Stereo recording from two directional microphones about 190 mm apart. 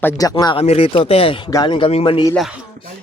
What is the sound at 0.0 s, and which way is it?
Speech, 15° left (ahead or behind).